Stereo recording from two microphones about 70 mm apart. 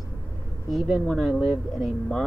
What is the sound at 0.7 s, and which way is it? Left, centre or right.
Speech, centre.